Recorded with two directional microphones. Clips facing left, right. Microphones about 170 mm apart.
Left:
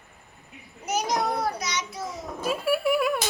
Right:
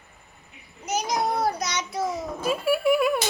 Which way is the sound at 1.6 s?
50° right (ahead or behind).